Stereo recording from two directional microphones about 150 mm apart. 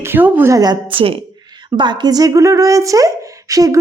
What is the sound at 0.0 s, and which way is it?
Speech, 15° right (ahead or behind).